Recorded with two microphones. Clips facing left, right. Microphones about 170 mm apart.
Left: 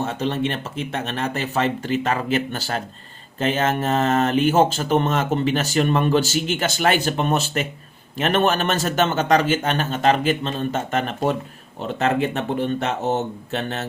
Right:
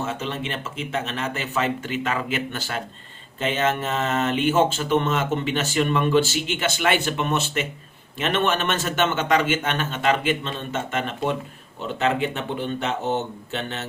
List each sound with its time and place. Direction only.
0.0 s speech: 35° left (ahead or behind)